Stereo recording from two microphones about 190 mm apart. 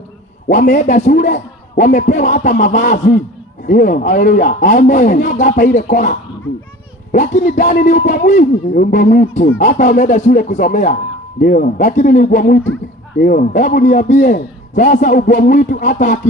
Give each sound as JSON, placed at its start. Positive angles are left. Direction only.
{"t": 0.4, "sound": "a man's voice", "side_deg": 40}